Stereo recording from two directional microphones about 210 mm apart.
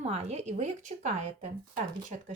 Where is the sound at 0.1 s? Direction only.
30° right (ahead or behind).